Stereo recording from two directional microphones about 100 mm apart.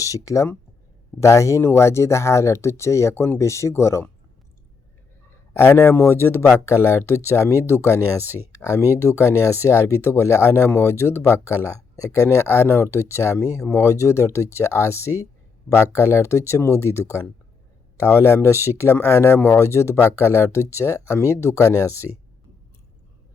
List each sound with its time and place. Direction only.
0.0 s speech: 30° left (ahead or behind)
5.5 s speech: 25° left (ahead or behind)
7.9 s speech: 20° right (ahead or behind)
8.5 s speech: 30° left (ahead or behind)